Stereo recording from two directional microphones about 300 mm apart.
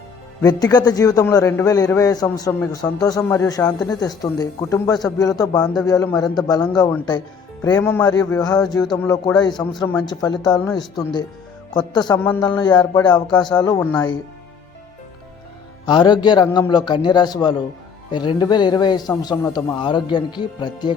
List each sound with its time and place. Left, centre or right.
0.4 s a man's voice: centre
10.7 s speech: centre
11.7 s a man's voice: centre
15.9 s a man's voice: centre